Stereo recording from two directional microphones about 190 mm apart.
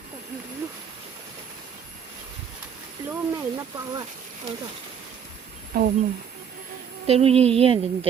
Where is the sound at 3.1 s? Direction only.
15° right (ahead or behind).